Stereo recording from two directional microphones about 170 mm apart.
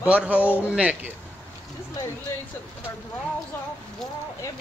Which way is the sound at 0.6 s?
10° right (ahead or behind).